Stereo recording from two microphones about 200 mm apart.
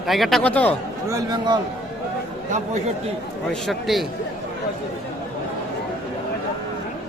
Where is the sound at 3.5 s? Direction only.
Centre (ahead or behind).